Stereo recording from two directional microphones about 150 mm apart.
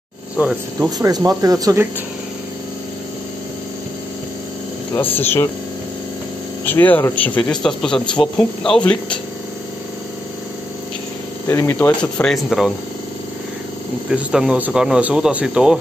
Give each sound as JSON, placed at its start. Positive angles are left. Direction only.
{"t": 0.4, "sound": "speech", "side_deg": -10}
{"t": 0.8, "sound": "speech", "side_deg": -25}
{"t": 4.9, "sound": "a man's voice", "side_deg": 15}
{"t": 6.6, "sound": "a man's voice", "side_deg": 10}
{"t": 11.4, "sound": "a man's voice", "side_deg": 15}
{"t": 14.0, "sound": "speech", "side_deg": -5}